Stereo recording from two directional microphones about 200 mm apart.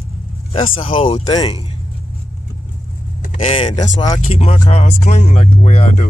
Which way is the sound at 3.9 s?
20° left (ahead or behind).